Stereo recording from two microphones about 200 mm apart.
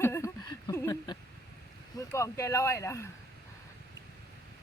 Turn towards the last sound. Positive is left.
turn(degrees=15)  # may be behind; listen again after turning